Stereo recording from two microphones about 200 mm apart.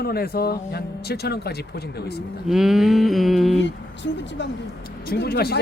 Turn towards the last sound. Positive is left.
turn(degrees=50)  # may be behind; listen again after turning